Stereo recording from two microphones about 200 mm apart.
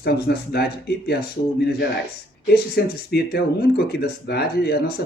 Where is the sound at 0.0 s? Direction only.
55° left (ahead or behind).